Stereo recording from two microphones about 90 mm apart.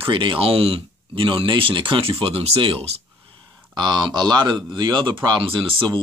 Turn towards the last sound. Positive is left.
turn(degrees=-65)  # may be behind; listen again after turning